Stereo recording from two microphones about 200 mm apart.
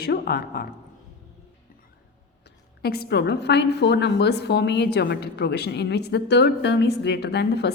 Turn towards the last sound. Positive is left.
turn(degrees=55)  # may be behind; listen again after turning